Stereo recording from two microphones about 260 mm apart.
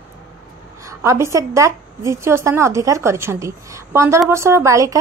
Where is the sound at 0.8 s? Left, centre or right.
Centre.